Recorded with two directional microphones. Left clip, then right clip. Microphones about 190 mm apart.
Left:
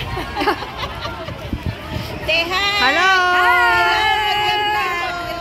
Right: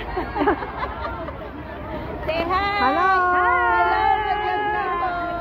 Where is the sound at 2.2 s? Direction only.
20° left (ahead or behind).